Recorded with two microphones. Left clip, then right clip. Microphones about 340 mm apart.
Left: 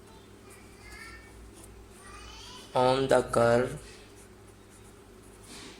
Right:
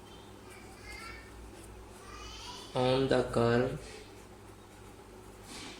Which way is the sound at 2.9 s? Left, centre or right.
Centre.